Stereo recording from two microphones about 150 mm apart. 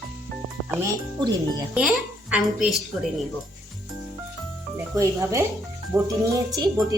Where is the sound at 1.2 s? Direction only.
30° right (ahead or behind).